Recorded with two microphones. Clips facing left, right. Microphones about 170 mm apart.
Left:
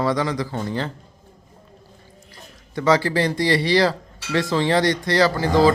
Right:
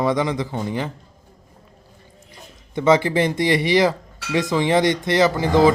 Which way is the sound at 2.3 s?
20° right (ahead or behind).